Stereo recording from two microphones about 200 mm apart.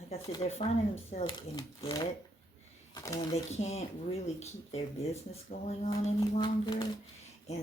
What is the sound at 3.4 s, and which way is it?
Speech, 35° left (ahead or behind).